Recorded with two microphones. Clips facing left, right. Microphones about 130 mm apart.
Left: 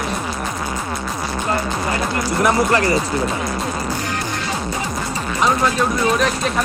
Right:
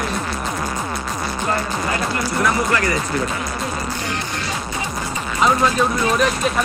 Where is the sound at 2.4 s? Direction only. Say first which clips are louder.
Left 4 dB; 25° left (ahead or behind).